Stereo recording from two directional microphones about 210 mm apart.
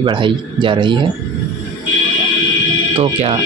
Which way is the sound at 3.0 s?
30° right (ahead or behind).